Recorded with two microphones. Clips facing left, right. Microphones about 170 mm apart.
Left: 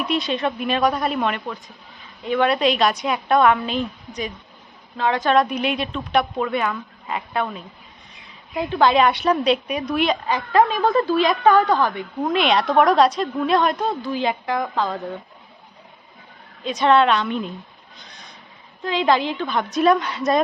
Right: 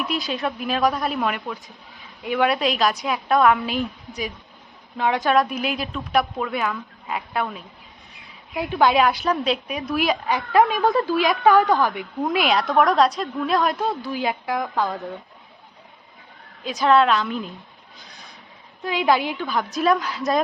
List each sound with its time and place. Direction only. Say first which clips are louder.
0.0 s speech: left 3 dB; centre (ahead or behind)
4.9 s a woman's voice: left 1 dB; 15° right (ahead or behind)
5.2 s speech: left 3 dB; centre (ahead or behind)
8.7 s speech: left 1 dB; 5° right (ahead or behind)
10.2 s a woman's voice: right 1 dB; 15° right (ahead or behind)
12.1 s speech: left 2 dB; centre (ahead or behind)
16.6 s speech: left 1 dB; centre (ahead or behind)